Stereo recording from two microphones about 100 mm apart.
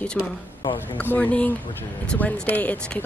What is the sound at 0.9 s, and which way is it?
Speech, 15° left (ahead or behind).